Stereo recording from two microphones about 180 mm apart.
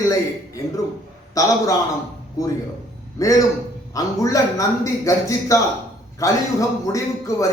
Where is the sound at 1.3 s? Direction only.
20° left (ahead or behind).